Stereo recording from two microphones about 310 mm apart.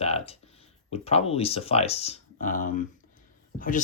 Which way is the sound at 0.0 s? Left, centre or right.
Centre.